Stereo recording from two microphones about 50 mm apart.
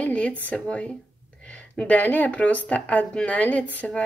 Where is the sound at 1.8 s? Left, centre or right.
Left.